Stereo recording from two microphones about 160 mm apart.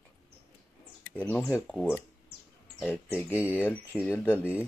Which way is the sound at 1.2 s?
10° left (ahead or behind).